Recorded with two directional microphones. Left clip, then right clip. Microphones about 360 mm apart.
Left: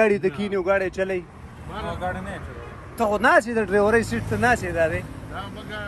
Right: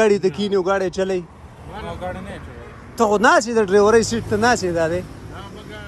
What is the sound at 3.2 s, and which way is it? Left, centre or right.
Speech, left.